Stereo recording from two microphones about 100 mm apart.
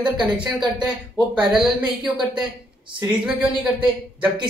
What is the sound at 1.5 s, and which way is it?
Speech, 55° right (ahead or behind).